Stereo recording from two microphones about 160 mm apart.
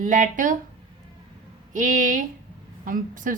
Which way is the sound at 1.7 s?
55° right (ahead or behind).